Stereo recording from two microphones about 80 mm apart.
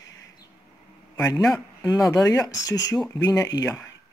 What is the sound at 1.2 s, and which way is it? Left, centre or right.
Speech, left.